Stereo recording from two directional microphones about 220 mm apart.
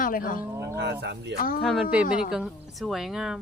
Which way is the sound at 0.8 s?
50° right (ahead or behind).